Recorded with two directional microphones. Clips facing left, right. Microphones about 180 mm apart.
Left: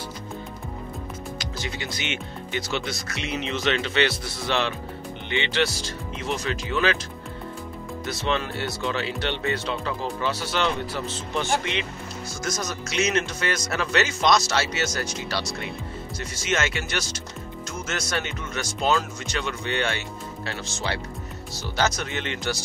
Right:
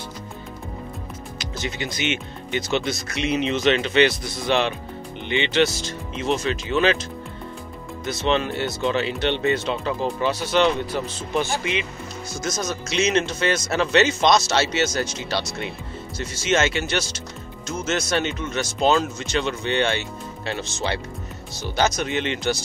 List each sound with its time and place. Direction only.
1.4 s speech: 20° right (ahead or behind)
8.1 s speech: 20° right (ahead or behind)